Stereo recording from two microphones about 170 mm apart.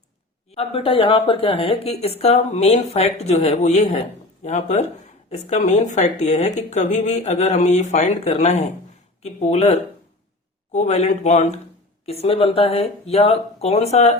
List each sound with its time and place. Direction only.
0.5 s speech: 35° left (ahead or behind)